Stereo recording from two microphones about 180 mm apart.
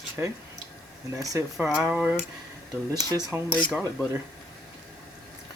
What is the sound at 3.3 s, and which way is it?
Speech, 10° right (ahead or behind).